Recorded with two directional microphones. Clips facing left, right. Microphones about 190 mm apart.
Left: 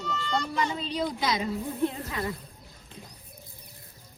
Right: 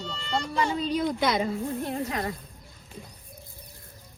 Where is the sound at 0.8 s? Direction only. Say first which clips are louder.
Right 3 dB; 55° right (ahead or behind).